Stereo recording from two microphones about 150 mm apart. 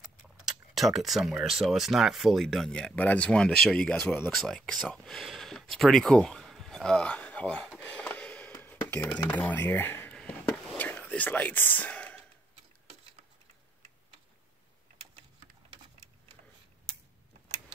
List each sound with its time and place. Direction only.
0.2 s speech: centre (ahead or behind)
7.8 s a sound: 10° left (ahead or behind)
10.8 s whispering: 10° left (ahead or behind)